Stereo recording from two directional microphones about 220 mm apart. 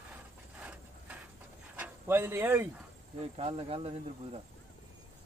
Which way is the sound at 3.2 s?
25° right (ahead or behind).